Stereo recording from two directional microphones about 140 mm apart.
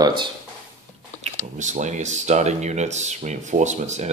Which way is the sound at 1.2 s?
60° right (ahead or behind).